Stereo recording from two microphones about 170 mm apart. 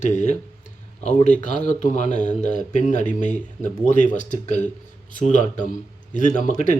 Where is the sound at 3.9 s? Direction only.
45° left (ahead or behind).